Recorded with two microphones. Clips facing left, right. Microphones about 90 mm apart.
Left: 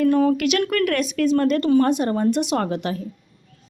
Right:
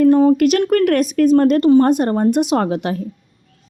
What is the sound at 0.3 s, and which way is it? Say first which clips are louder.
Speech: right 6 dB; 40° right (ahead or behind).